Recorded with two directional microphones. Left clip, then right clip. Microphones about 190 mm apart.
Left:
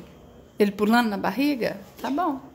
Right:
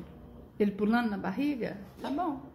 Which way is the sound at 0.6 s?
30° left (ahead or behind).